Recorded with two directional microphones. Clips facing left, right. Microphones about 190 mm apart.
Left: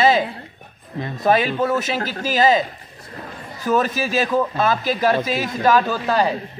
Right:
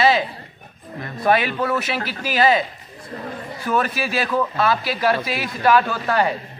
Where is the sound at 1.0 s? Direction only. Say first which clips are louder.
Left 1 dB; 20° left (ahead or behind).